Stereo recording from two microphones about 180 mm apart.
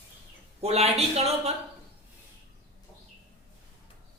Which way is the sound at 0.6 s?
35° right (ahead or behind).